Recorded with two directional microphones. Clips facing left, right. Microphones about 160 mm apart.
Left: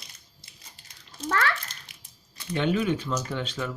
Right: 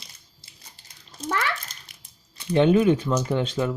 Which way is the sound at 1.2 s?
15° right (ahead or behind).